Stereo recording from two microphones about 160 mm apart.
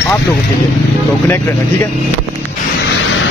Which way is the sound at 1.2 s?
15° left (ahead or behind).